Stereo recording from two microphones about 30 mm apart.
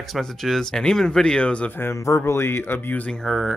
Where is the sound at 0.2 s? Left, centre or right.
Centre.